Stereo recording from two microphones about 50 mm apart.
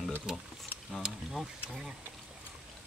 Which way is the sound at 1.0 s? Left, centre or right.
Centre.